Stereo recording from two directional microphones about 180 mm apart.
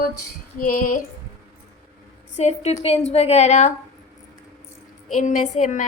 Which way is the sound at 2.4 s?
40° left (ahead or behind).